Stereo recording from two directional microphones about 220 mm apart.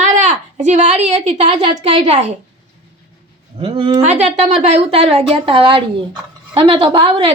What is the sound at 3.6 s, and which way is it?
A woman's voice, 25° right (ahead or behind).